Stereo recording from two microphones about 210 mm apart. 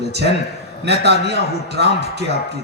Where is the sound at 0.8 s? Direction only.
55° right (ahead or behind).